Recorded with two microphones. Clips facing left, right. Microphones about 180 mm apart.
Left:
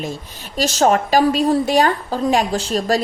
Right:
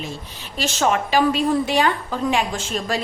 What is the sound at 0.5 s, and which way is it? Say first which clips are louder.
A woman's voice: left 5 dB; 40° left (ahead or behind).